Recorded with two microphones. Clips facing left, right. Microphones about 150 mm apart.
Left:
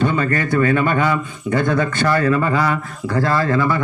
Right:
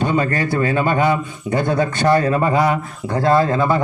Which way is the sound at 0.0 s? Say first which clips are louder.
Even; 20° right (ahead or behind).